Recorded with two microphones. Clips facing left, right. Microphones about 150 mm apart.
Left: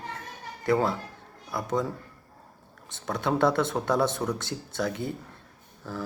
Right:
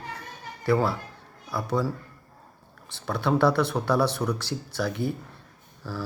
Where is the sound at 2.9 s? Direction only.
20° left (ahead or behind).